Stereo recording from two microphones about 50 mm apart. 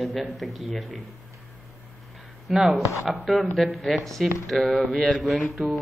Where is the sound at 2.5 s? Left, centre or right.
Centre.